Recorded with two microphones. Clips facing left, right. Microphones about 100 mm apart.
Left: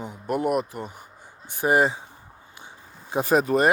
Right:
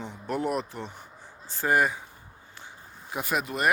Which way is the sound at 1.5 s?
20° left (ahead or behind).